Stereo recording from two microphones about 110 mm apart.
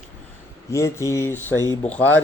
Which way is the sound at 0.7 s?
25° left (ahead or behind).